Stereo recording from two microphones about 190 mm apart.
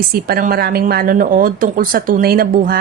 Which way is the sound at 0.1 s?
50° right (ahead or behind).